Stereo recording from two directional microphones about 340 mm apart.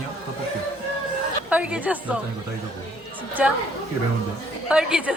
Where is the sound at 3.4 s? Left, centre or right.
Centre.